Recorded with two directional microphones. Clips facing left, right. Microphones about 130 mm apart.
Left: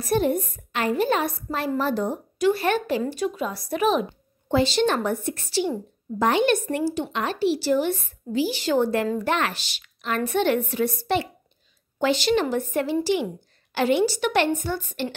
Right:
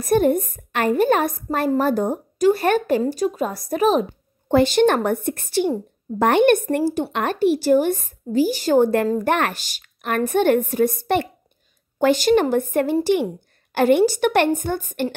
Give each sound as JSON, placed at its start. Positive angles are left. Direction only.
{"t": 0.0, "sound": "a woman's voice", "side_deg": -50}
{"t": 4.5, "sound": "a woman's voice", "side_deg": -55}